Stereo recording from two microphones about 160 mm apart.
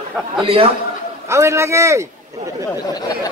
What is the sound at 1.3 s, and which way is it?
Speech, 15° right (ahead or behind).